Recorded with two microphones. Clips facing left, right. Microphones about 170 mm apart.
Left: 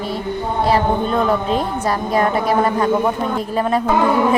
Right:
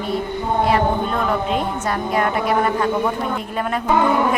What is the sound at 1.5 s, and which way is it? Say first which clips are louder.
A woman's voice: left 2 dB; 35° left (ahead or behind).